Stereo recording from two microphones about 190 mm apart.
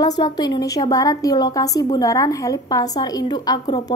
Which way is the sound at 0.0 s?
20° left (ahead or behind).